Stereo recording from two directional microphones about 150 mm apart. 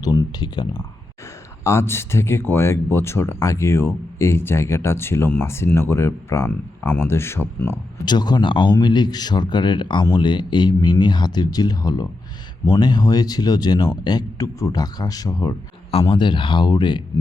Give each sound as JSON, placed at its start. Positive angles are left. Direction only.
{"t": 0.0, "sound": "speech", "side_deg": 25}
{"t": 1.6, "sound": "speech", "side_deg": 15}
{"t": 8.0, "sound": "speech", "side_deg": 30}
{"t": 15.9, "sound": "speech", "side_deg": 40}